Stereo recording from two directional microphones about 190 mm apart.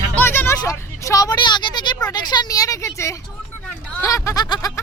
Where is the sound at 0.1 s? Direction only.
10° left (ahead or behind).